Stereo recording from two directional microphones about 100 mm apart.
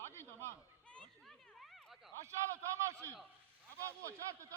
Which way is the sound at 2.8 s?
30° right (ahead or behind).